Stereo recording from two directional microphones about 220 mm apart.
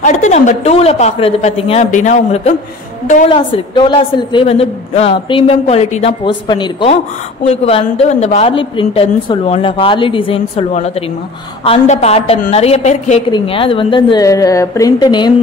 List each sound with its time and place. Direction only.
0.0 s a woman's voice: 35° left (ahead or behind)